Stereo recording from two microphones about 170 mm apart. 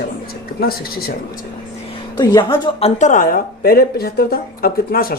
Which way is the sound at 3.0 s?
50° left (ahead or behind).